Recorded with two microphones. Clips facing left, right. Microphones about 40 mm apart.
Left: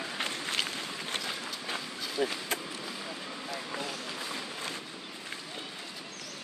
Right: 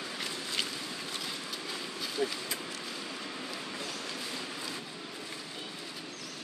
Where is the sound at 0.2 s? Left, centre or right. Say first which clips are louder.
Left 5 dB; left.